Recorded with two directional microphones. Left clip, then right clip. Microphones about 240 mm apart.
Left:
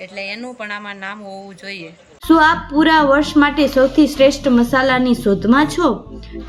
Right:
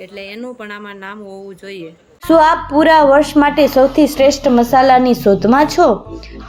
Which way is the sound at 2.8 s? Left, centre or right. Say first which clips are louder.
Right 4 dB; centre.